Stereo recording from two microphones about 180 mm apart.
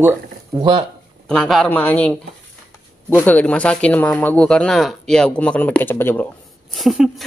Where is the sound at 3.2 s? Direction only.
10° left (ahead or behind).